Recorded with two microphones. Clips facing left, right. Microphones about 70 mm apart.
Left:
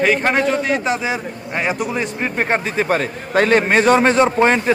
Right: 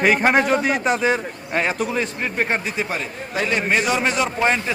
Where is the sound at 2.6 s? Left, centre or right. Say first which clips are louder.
Left 7 dB; left.